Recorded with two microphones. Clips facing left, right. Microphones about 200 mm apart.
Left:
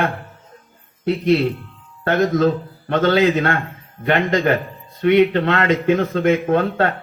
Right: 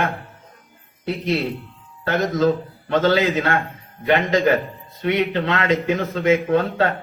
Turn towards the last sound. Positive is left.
turn(degrees=55)  # may be behind; listen again after turning